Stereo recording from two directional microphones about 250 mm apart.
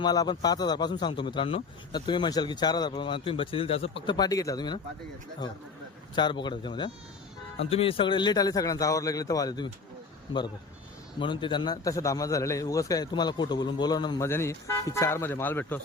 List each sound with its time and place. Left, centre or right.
0.0 s a man's voice: centre
6.1 s a man's voice: centre
11.2 s a man's voice: centre